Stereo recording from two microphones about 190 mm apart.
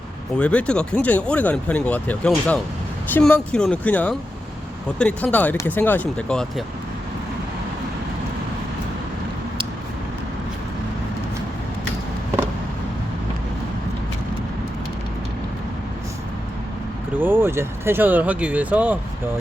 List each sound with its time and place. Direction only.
0.3 s speech: 5° left (ahead or behind)
17.2 s speech: 10° right (ahead or behind)